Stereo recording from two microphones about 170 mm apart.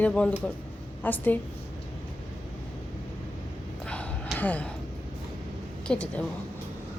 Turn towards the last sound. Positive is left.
turn(degrees=5)  # may be behind; listen again after turning